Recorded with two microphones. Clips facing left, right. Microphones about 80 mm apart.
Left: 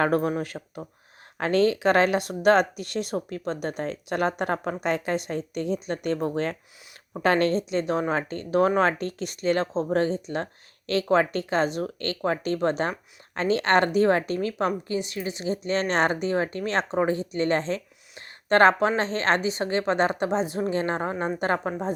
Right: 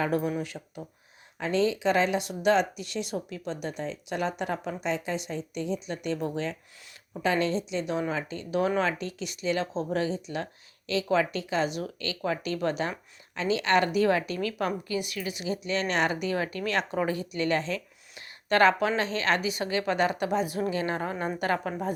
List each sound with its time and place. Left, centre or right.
0.0 s a woman's voice: left